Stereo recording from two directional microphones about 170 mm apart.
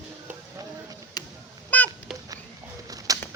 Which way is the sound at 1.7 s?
10° left (ahead or behind).